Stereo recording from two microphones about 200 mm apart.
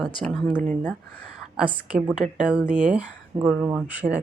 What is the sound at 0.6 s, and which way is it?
Speech, 40° right (ahead or behind).